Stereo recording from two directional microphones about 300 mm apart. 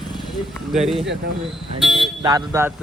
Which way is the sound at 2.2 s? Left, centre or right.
Centre.